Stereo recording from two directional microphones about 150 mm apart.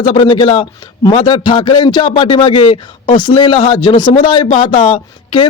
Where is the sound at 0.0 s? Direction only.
35° left (ahead or behind).